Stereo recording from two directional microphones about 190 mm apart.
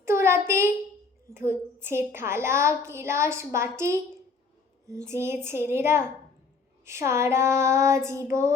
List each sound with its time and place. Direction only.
0.0 s child singing: 15° right (ahead or behind)
1.3 s a woman's voice: 10° right (ahead or behind)